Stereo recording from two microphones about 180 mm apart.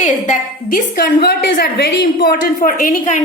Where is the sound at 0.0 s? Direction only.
45° left (ahead or behind).